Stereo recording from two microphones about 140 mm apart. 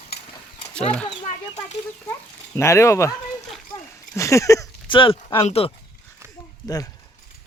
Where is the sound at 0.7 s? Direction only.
5° left (ahead or behind).